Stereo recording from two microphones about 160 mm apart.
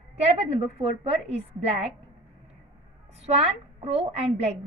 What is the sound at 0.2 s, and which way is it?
A woman's voice, 40° right (ahead or behind).